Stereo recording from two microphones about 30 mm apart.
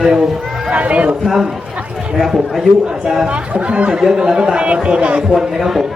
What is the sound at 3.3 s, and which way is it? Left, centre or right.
Speech, right.